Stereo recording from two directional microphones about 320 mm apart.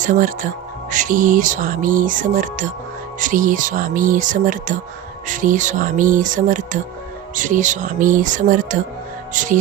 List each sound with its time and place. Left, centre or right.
0.0 s music: right